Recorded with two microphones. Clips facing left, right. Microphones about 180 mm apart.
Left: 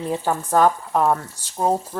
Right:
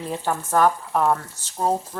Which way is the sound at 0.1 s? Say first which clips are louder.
Left 2 dB; 15° left (ahead or behind).